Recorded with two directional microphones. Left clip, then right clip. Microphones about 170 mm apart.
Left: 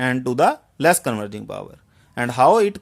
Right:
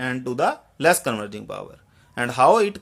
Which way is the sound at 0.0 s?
55° left (ahead or behind).